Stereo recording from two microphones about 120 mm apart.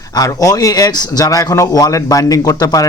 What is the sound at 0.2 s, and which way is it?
Speech, 30° left (ahead or behind).